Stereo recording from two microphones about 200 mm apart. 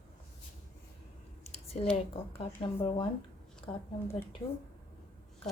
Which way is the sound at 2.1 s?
25° left (ahead or behind).